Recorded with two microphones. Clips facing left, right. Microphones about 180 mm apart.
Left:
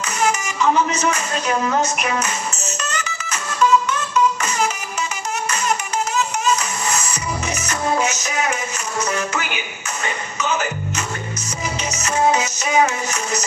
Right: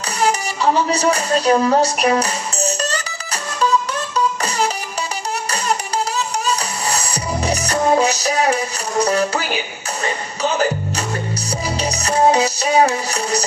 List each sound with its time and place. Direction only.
0.2 s music: 35° right (ahead or behind)